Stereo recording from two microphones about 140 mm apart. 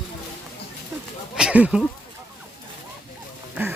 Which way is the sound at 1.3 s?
10° right (ahead or behind).